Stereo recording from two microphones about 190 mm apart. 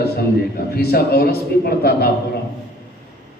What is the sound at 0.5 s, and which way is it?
A man's voice, 55° left (ahead or behind).